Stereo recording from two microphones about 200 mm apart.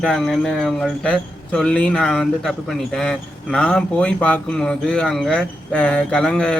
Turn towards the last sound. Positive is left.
turn(degrees=5)  # may be behind; listen again after turning